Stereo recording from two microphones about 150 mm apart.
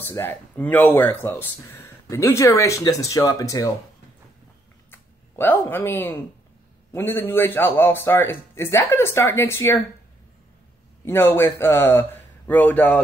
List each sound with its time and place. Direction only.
0.1 s speech: 15° left (ahead or behind)
4.9 s a man's voice: 15° left (ahead or behind)
11.1 s a man's voice: 15° left (ahead or behind)